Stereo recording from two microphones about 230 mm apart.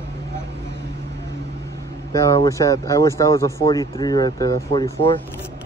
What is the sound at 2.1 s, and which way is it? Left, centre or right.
Speech, centre.